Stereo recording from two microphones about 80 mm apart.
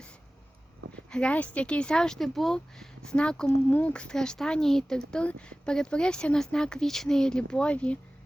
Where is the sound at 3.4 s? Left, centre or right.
Left.